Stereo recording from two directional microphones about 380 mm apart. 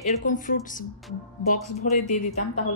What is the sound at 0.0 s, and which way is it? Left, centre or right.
Speech, centre.